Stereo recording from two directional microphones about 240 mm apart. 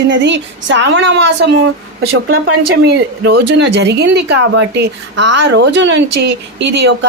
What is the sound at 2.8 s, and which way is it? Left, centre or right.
A woman's voice, right.